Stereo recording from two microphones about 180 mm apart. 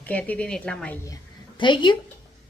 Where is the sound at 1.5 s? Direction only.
25° left (ahead or behind).